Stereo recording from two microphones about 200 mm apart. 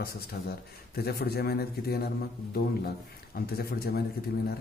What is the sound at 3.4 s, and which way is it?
Speech, 50° left (ahead or behind).